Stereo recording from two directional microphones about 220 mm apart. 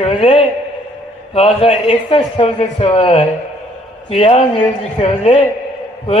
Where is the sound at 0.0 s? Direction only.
25° left (ahead or behind).